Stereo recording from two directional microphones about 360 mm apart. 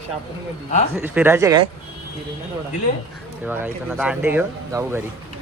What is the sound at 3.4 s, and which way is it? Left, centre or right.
Speech, centre.